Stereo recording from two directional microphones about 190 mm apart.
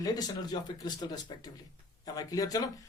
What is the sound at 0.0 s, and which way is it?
A man's voice, 20° left (ahead or behind).